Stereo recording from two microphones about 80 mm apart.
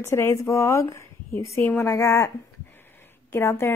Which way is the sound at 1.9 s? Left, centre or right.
Left.